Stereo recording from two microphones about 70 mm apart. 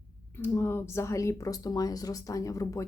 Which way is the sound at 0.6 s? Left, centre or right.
Left.